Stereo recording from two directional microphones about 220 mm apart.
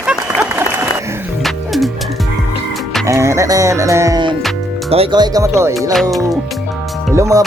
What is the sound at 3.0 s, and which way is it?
Music, 15° right (ahead or behind).